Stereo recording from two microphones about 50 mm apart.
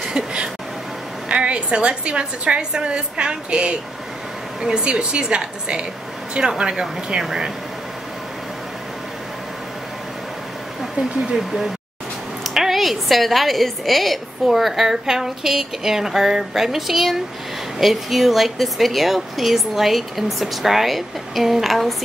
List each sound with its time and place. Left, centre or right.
0.0 s a sound: centre
1.3 s a woman's voice: right
11.2 s a woman's voice: centre